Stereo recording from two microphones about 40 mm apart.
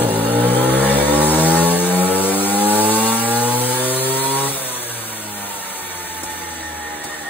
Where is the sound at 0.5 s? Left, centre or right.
Left.